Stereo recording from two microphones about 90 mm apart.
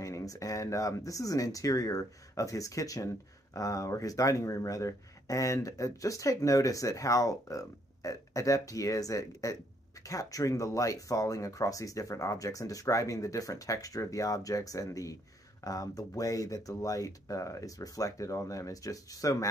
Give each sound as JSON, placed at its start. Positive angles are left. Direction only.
{"t": 0.0, "sound": "speech", "side_deg": 40}